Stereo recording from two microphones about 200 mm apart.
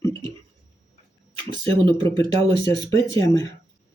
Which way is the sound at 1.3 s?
25° right (ahead or behind).